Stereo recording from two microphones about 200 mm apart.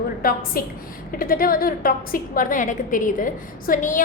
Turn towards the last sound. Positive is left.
turn(degrees=40)  # may be behind; listen again after turning